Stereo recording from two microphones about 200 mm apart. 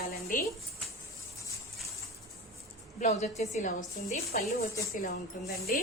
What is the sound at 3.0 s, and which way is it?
A woman's voice, 35° left (ahead or behind).